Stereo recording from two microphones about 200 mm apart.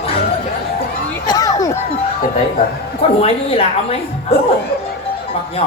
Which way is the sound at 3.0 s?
30° left (ahead or behind).